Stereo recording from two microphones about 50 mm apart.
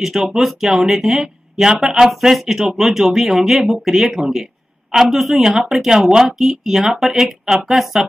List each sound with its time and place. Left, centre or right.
0.0 s a woman's voice: centre